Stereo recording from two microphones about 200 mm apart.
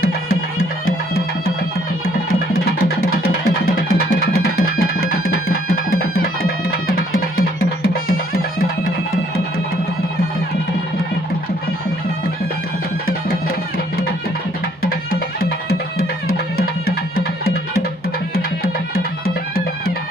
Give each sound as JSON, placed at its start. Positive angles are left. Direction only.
{"t": 3.7, "sound": "music", "side_deg": 45}
{"t": 14.8, "sound": "music", "side_deg": 50}
{"t": 16.6, "sound": "music", "side_deg": 50}
{"t": 18.6, "sound": "music", "side_deg": 50}